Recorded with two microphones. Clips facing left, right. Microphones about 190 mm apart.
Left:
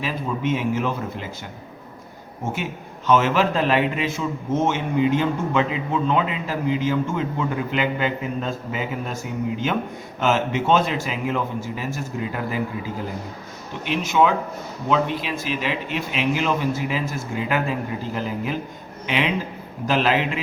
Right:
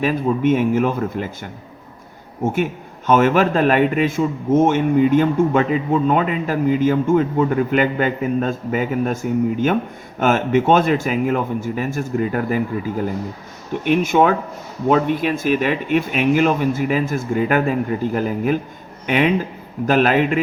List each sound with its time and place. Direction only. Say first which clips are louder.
0.0 s speech: right 8 dB; 50° right (ahead or behind)
3.1 s speech: right 4 dB; 50° right (ahead or behind)
10.2 s a man's voice: right 5 dB; 50° right (ahead or behind)